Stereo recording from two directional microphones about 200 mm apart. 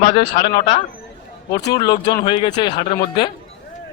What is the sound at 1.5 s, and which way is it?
A man's voice, 20° left (ahead or behind).